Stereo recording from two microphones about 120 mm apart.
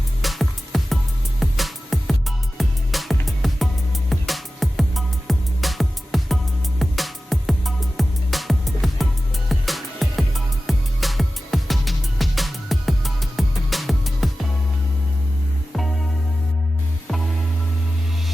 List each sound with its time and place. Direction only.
0.2 s music: centre (ahead or behind)
15.7 s music: centre (ahead or behind)